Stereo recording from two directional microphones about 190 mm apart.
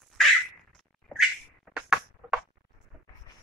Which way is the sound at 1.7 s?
5° right (ahead or behind).